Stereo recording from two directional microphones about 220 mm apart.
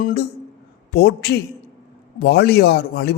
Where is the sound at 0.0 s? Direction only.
45° left (ahead or behind).